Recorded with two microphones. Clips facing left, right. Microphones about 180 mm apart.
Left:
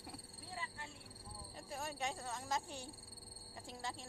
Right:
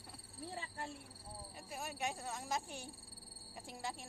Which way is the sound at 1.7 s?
10° right (ahead or behind).